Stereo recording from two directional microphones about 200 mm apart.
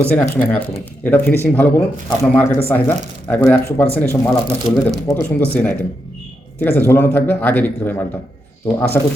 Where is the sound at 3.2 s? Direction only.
10° left (ahead or behind).